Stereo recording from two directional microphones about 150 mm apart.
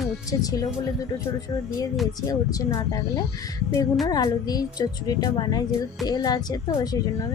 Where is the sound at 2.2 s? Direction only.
25° left (ahead or behind).